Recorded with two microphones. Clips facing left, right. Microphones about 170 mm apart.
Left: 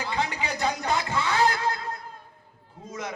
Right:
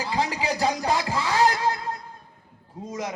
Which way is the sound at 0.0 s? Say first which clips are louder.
Right 3 dB; 35° right (ahead or behind).